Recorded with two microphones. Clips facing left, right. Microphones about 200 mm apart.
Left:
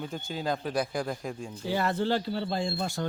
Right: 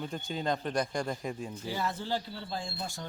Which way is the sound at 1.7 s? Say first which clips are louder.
Left 7 dB; 65° left (ahead or behind).